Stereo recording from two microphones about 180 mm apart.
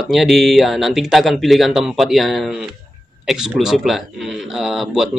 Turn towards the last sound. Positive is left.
turn(degrees=0)  # may be behind; listen again after turning